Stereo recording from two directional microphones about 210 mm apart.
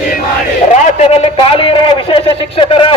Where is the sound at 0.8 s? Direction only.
30° left (ahead or behind).